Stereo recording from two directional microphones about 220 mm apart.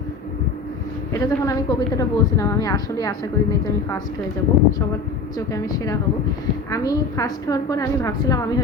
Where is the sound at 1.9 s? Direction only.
15° left (ahead or behind).